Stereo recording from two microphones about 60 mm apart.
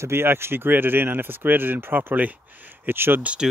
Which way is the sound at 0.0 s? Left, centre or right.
Right.